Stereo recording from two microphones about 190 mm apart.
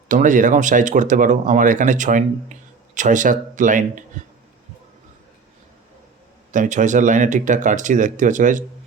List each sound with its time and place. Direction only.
0.1 s speech: 45° right (ahead or behind)
6.5 s speech: 40° right (ahead or behind)